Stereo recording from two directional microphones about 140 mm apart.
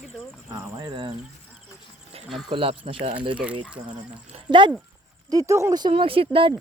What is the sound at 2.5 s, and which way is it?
Speech, 40° right (ahead or behind).